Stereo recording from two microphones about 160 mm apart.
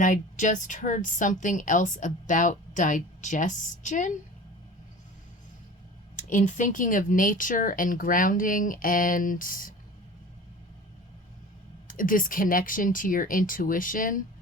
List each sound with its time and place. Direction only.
0.0 s a woman's voice: 55° left (ahead or behind)
6.1 s speech: 50° left (ahead or behind)
11.9 s speech: 60° left (ahead or behind)